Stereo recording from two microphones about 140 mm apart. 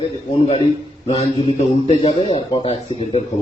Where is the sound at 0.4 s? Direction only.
40° left (ahead or behind).